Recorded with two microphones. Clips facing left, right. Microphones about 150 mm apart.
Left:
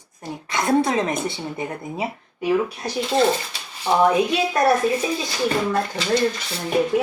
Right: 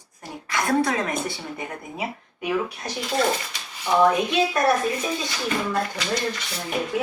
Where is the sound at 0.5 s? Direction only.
25° left (ahead or behind).